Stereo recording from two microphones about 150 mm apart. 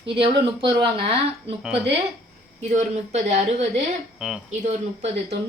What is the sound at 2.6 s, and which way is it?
A woman's voice, 50° right (ahead or behind).